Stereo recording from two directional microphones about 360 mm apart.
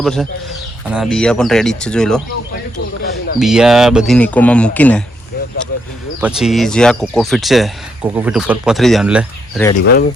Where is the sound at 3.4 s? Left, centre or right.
Centre.